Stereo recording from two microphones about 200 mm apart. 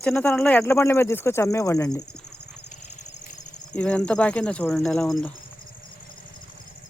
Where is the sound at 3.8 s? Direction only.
5° left (ahead or behind).